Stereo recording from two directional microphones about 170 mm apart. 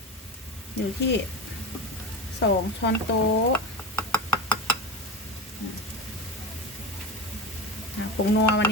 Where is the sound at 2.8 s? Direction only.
90° left.